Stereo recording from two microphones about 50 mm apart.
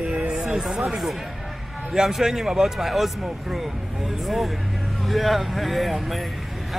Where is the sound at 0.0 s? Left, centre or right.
Right.